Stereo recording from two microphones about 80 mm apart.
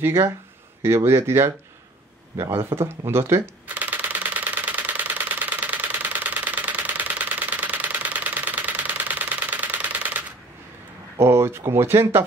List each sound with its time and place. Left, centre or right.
0.8 s speech: right
3.6 s a sound: right
11.1 s speech: right